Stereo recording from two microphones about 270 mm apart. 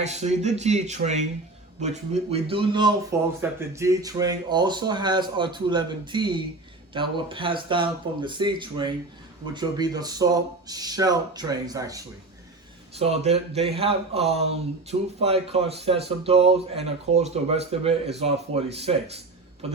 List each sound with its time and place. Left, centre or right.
0.0 s speech: right
13.0 s speech: right